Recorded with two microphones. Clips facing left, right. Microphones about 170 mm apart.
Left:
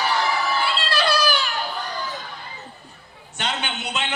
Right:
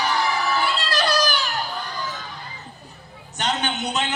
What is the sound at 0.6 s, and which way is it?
Children playing, 45° right (ahead or behind).